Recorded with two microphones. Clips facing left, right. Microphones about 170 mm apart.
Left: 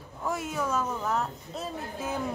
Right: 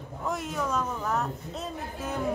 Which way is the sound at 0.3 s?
Centre (ahead or behind).